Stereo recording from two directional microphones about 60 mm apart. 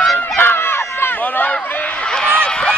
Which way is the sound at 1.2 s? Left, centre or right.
Left.